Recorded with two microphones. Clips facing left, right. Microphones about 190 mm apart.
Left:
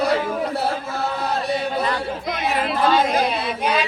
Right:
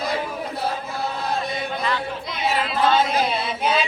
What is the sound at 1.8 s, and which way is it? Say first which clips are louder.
Chatter: left 2 dB; 45° left (ahead or behind).